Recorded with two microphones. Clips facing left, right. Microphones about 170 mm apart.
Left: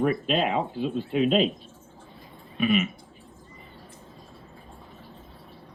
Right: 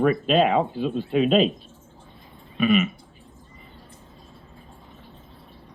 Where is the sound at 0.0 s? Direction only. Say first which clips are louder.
Right 5 dB; 90° right.